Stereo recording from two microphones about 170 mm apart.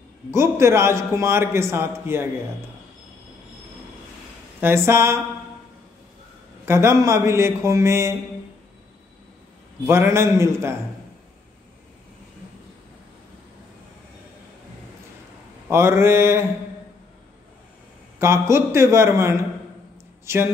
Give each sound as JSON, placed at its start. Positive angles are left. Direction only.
{"t": 0.3, "sound": "a man's voice", "side_deg": -15}
{"t": 4.6, "sound": "a man's voice", "side_deg": -15}
{"t": 6.6, "sound": "a man's voice", "side_deg": -15}
{"t": 9.8, "sound": "a man's voice", "side_deg": -15}
{"t": 15.7, "sound": "a man's voice", "side_deg": -15}
{"t": 18.2, "sound": "a man's voice", "side_deg": -15}